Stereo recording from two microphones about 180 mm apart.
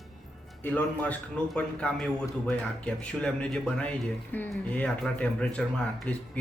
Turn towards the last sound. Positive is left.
turn(degrees=5)  # may be behind; listen again after turning